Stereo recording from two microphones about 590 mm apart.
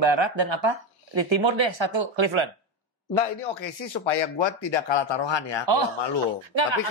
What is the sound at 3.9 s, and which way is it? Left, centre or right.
Speech, left.